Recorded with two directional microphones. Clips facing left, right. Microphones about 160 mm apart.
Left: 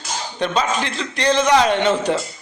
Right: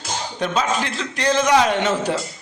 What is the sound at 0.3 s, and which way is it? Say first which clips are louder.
A man's voice: left 1 dB; 5° right (ahead or behind).